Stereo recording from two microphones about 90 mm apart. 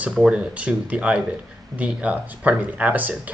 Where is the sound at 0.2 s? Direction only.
10° right (ahead or behind).